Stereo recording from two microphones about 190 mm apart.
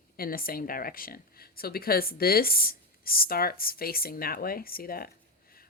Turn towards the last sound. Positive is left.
turn(degrees=50)  # may be behind; listen again after turning